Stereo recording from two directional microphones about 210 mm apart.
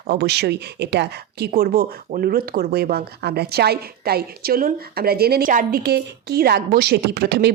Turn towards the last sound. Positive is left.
turn(degrees=-50)  # may be behind; listen again after turning